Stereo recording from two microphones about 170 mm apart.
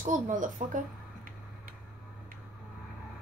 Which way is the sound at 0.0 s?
50° right (ahead or behind).